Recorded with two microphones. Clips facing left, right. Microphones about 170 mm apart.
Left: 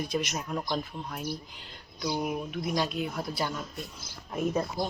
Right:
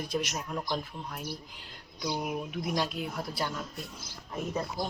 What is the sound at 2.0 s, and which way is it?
Speech, 5° left (ahead or behind).